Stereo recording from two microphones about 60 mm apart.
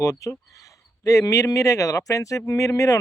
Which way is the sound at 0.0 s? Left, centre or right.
Left.